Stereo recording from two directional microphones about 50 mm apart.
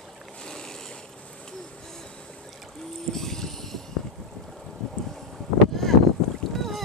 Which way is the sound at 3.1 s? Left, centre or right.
Centre.